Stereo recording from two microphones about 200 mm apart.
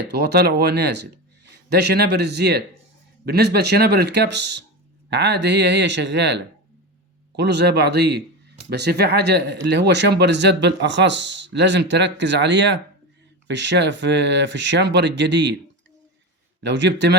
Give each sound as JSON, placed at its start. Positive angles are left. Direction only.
{"t": 0.0, "sound": "speech", "side_deg": -55}
{"t": 16.6, "sound": "speech", "side_deg": -60}